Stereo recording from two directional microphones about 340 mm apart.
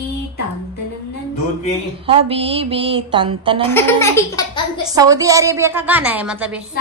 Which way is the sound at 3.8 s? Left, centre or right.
Centre.